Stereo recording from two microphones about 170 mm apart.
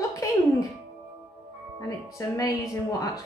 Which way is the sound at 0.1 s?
20° left (ahead or behind).